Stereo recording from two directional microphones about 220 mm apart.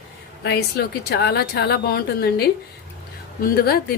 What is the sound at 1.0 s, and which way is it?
Speech, 50° left (ahead or behind).